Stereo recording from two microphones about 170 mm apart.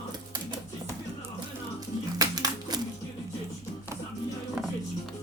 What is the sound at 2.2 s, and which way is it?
Music, 25° right (ahead or behind).